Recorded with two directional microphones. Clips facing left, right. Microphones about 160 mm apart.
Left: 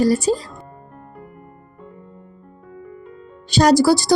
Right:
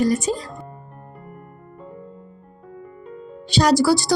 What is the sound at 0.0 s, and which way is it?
Speech, 35° left (ahead or behind).